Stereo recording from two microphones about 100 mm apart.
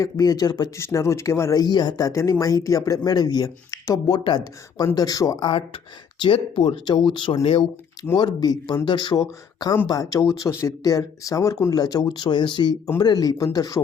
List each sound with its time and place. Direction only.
0.0 s speech: 40° left (ahead or behind)
0.8 s speech: 30° left (ahead or behind)
4.2 s speech: 50° left (ahead or behind)
4.9 s speech: 40° left (ahead or behind)
5.5 s speech: 60° left (ahead or behind)
8.1 s speech: 45° left (ahead or behind)
9.9 s speech: 35° left (ahead or behind); by 12.7 s 50° left (ahead or behind)
13.0 s speech: 40° left (ahead or behind)